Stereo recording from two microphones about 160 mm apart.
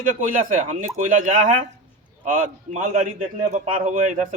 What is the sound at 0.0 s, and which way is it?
A man's voice, 55° right (ahead or behind).